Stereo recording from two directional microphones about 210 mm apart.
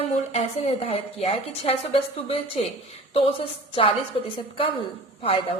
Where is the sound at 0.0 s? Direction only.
30° left (ahead or behind).